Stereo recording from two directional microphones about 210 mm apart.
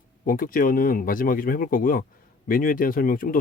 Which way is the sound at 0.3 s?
40° left (ahead or behind).